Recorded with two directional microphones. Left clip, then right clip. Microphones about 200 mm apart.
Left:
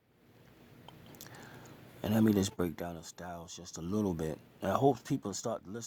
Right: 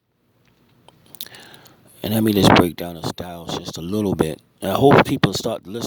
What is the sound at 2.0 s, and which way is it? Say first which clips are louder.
Speech: right 13 dB; 40° right (ahead or behind).